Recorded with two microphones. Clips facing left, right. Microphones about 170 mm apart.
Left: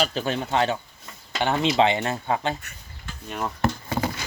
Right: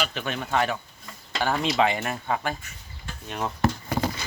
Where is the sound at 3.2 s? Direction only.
Centre (ahead or behind).